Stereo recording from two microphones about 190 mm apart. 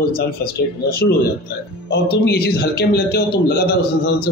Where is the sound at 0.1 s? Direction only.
55° left (ahead or behind).